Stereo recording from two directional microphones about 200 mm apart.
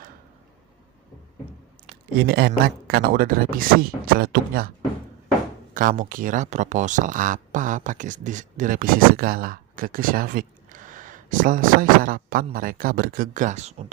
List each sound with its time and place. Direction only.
2.2 s speech: 50° right (ahead or behind)
5.7 s speech: 45° right (ahead or behind)